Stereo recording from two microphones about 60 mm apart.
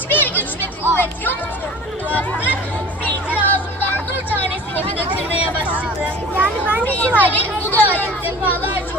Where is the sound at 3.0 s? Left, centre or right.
Left.